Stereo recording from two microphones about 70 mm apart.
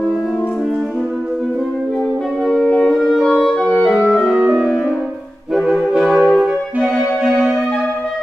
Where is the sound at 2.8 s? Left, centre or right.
Centre.